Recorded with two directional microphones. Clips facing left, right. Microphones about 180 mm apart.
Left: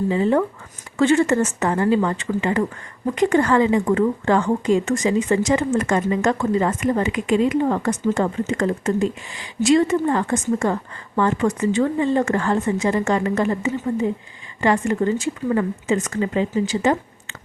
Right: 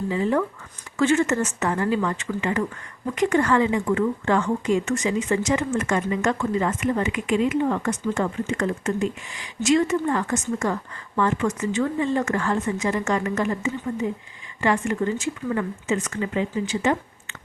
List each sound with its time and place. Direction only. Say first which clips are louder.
0.1 s speech: left 2 dB; 30° left (ahead or behind)